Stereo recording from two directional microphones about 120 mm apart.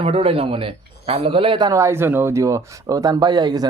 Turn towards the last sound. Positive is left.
turn(degrees=-35)  # may be behind; listen again after turning